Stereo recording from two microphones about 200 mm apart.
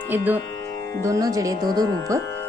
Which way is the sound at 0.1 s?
10° right (ahead or behind).